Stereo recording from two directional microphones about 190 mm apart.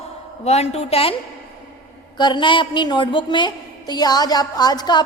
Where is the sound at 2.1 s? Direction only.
25° left (ahead or behind).